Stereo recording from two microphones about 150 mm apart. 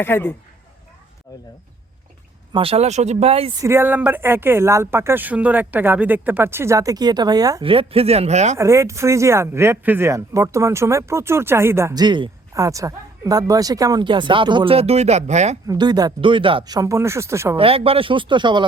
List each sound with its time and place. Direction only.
0.0 s speech: 15° left (ahead or behind)
2.5 s speech: 40° right (ahead or behind)
3.6 s speech: 15° right (ahead or behind)
7.6 s speech: 35° right (ahead or behind)
8.5 s speech: 20° right (ahead or behind)
12.0 s speech: 30° right (ahead or behind); by 15.5 s 50° right (ahead or behind)
15.6 s speech: 25° right (ahead or behind)
17.6 s speech: 40° right (ahead or behind)